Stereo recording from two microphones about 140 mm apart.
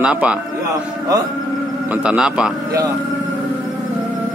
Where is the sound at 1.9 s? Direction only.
10° right (ahead or behind).